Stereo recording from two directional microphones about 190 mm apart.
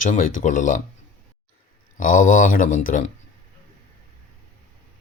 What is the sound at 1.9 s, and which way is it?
Speech, 45° left (ahead or behind).